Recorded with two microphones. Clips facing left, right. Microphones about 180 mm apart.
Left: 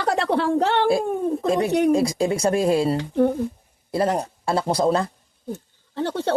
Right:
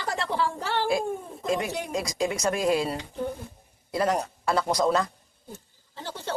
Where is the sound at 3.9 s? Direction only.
30° left (ahead or behind).